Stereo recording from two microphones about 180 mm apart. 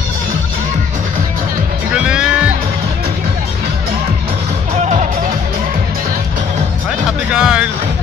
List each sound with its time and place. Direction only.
2.0 s music: 5° right (ahead or behind)
4.7 s music: 40° right (ahead or behind)
7.3 s music: 5° right (ahead or behind)